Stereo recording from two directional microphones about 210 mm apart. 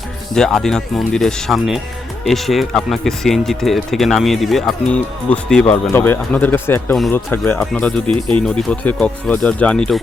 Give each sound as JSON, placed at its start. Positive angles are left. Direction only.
{"t": 0.3, "sound": "speech", "side_deg": 5}
{"t": 8.1, "sound": "speech", "side_deg": -25}
{"t": 8.4, "sound": "speech", "side_deg": 5}